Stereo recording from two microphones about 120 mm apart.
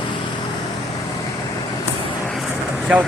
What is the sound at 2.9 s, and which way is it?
Speech, 10° right (ahead or behind).